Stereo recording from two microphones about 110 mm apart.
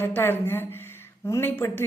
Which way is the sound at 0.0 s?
20° left (ahead or behind).